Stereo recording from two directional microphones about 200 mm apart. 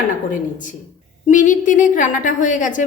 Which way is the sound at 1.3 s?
40° left (ahead or behind).